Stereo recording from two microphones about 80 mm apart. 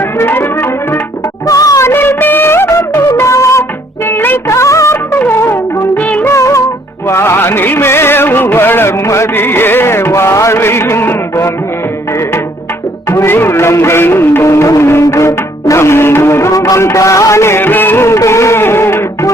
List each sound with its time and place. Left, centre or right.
0.2 s music: left
1.5 s music: left
1.9 s music of bollywood: left
3.2 s music: left
4.1 s music: left
4.4 s music of bollywood: left
5.8 s music: centre
6.3 s music: left
13.1 s music: left